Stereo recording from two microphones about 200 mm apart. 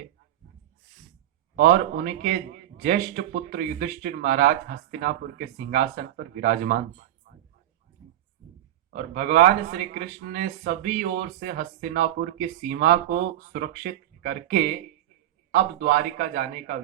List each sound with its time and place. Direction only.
1.5 s speech: 45° right (ahead or behind)
8.9 s speech: 45° right (ahead or behind)